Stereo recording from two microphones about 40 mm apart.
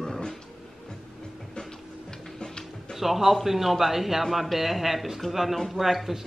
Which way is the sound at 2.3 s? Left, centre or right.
Centre.